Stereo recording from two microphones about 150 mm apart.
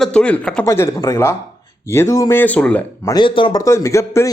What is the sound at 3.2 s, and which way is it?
Speech, 35° left (ahead or behind).